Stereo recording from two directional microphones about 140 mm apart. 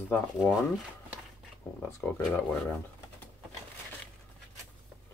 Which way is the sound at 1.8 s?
15° left (ahead or behind).